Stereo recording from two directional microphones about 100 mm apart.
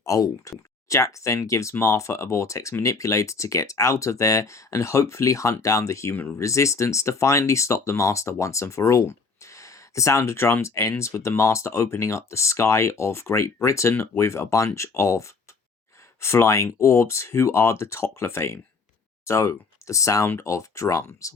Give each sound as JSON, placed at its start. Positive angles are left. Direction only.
{"t": 0.0, "sound": "speech", "side_deg": 35}